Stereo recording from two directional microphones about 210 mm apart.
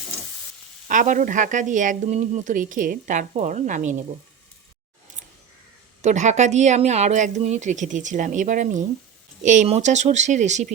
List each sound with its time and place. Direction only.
0.9 s speech: 40° right (ahead or behind)
6.0 s speech: 35° right (ahead or behind)